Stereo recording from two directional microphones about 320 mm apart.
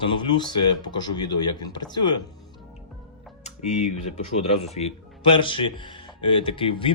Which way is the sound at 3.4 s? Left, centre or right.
Left.